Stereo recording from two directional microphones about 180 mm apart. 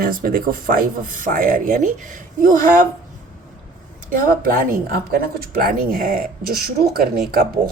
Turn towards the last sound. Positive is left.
turn(degrees=-55)  # may be behind; listen again after turning